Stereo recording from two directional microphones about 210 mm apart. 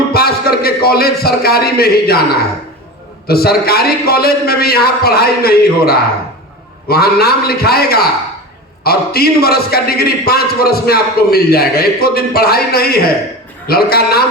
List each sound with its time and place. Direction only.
0.1 s a man's voice: 45° left (ahead or behind)
3.2 s a man's voice: 45° left (ahead or behind)